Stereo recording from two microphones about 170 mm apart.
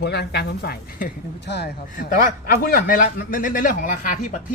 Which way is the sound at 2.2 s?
60° left (ahead or behind).